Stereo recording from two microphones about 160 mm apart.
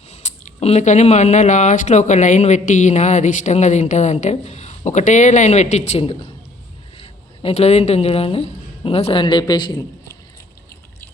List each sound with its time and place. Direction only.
0.1 s speech: 45° left (ahead or behind); by 10.2 s 25° left (ahead or behind)